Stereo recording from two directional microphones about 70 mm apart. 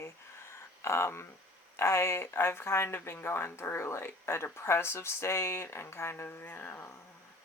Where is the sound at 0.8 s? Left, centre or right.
Left.